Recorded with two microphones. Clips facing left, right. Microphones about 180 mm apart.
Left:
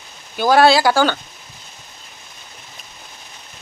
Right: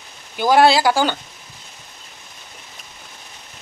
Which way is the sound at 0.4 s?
15° right (ahead or behind).